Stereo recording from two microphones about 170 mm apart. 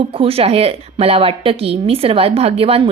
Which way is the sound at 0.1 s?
35° right (ahead or behind).